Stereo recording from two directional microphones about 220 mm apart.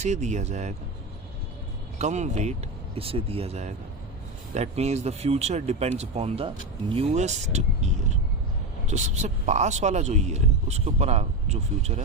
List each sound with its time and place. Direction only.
0.0 s speech: 30° right (ahead or behind)
2.0 s speech: 30° right (ahead or behind)